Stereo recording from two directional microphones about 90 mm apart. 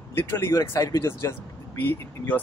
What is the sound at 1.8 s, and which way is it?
Speech, 20° left (ahead or behind).